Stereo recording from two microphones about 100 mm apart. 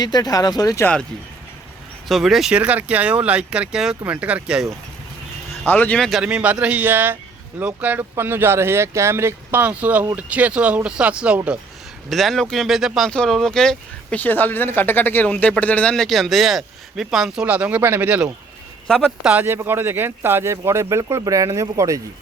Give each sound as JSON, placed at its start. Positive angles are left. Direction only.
{"t": 0.0, "sound": "speech", "side_deg": 40}
{"t": 2.0, "sound": "speech", "side_deg": 0}
{"t": 5.6, "sound": "speech", "side_deg": 20}
{"t": 6.0, "sound": "speech", "side_deg": 0}
{"t": 6.2, "sound": "speech", "side_deg": -15}
{"t": 12.0, "sound": "speech", "side_deg": 0}
{"t": 13.1, "sound": "speech", "side_deg": 5}
{"t": 14.2, "sound": "speech", "side_deg": 20}
{"t": 17.4, "sound": "speech", "side_deg": -15}
{"t": 19.5, "sound": "speech", "side_deg": -25}